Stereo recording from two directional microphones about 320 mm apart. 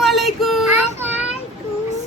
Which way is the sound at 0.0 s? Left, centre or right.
Centre.